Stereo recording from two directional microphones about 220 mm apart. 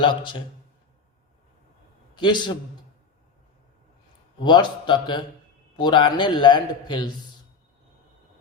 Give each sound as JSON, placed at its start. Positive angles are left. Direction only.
{"t": 0.0, "sound": "a man's voice", "side_deg": 20}
{"t": 2.1, "sound": "a man's voice", "side_deg": 20}
{"t": 4.4, "sound": "a man's voice", "side_deg": 20}